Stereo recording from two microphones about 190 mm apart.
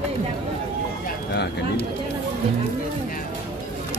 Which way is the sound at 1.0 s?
60° left (ahead or behind).